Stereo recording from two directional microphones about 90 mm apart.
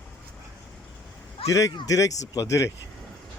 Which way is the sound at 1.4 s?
40° left (ahead or behind).